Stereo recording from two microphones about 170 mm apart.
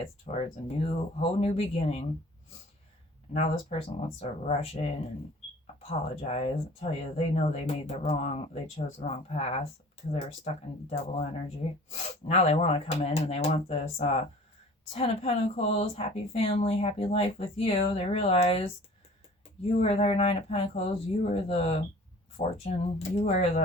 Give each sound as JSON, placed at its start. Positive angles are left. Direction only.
{"t": 0.0, "sound": "a woman's voice", "side_deg": 40}
{"t": 3.3, "sound": "a woman's voice", "side_deg": 40}
{"t": 19.8, "sound": "a woman's voice", "side_deg": 40}